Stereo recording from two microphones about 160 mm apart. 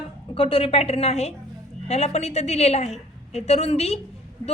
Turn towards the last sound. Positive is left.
turn(degrees=40)  # may be behind; listen again after turning